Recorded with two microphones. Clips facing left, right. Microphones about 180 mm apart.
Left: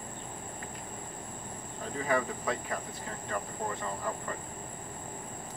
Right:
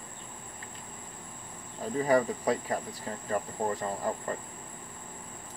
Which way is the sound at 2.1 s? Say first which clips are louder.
Right 5 dB; 35° right (ahead or behind).